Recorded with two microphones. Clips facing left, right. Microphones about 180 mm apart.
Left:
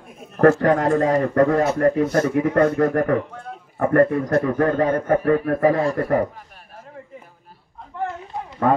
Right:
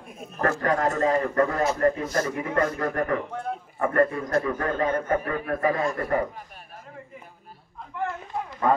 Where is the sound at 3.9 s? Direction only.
65° left (ahead or behind).